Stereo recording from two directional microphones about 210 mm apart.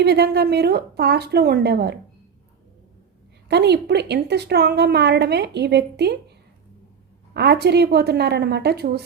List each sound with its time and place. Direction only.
0.0 s a woman's voice: 50° right (ahead or behind)
3.5 s a woman's voice: 50° right (ahead or behind)
7.3 s a woman's voice: 50° right (ahead or behind)